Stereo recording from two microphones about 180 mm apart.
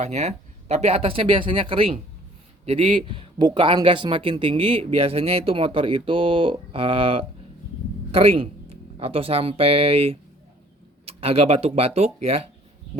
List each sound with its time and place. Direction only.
0.0 s speech: 40° right (ahead or behind)